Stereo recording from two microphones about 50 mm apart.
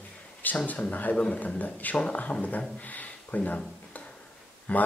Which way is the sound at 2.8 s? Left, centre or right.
Left.